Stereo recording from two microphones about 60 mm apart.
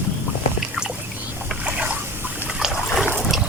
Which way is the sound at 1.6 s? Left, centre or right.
Right.